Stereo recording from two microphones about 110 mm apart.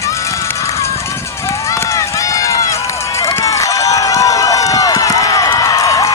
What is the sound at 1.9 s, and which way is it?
Run, 30° left (ahead or behind).